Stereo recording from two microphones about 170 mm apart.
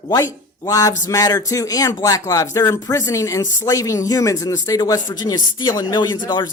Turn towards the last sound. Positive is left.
turn(degrees=25)  # may be behind; listen again after turning